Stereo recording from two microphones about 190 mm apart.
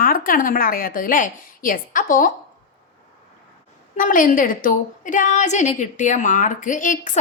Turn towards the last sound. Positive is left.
turn(degrees=45)  # may be behind; listen again after turning